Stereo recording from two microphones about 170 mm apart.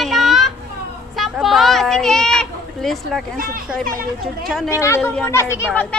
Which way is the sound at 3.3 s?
55° right (ahead or behind).